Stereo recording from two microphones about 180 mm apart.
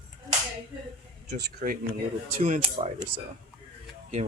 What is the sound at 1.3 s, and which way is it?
Speech, 65° right (ahead or behind).